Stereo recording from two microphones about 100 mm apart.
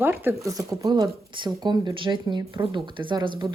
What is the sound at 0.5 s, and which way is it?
Speech, 35° right (ahead or behind).